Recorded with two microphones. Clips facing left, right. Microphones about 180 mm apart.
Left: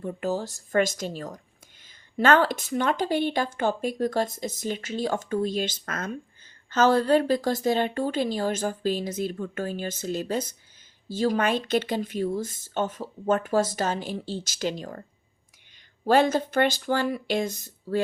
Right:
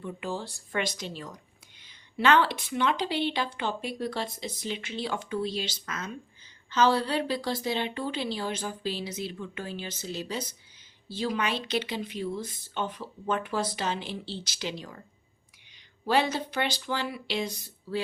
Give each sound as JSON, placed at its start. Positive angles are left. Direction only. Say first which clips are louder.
{"t": 0.0, "sound": "speech", "louder": "left 6 dB", "side_deg": 45}
{"t": 16.0, "sound": "speech", "louder": "left 6 dB", "side_deg": 50}